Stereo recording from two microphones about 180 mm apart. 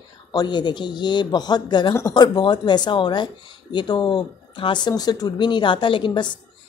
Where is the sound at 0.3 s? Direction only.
25° left (ahead or behind).